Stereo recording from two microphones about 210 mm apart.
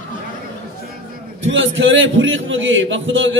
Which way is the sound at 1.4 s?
65° right (ahead or behind).